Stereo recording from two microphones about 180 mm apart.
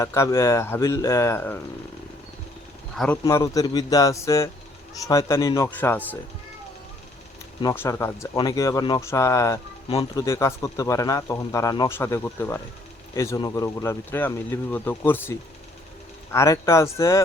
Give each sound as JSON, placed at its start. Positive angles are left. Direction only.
{"t": 0.0, "sound": "speech", "side_deg": 15}
{"t": 2.9, "sound": "speech", "side_deg": 5}
{"t": 3.2, "sound": "a man's voice", "side_deg": 20}
{"t": 7.6, "sound": "a man's voice", "side_deg": 15}